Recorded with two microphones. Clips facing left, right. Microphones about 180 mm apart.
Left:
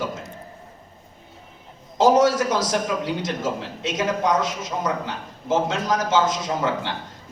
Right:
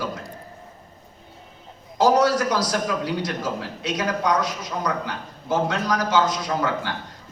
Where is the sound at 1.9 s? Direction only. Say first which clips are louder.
Left 2 dB; 25° left (ahead or behind).